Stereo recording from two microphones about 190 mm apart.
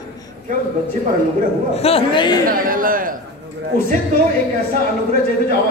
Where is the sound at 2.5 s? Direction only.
50° right (ahead or behind).